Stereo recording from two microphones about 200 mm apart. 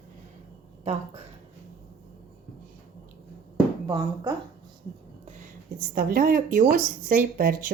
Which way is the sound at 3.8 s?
20° right (ahead or behind).